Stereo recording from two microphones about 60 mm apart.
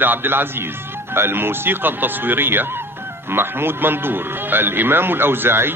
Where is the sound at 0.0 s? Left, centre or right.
Right.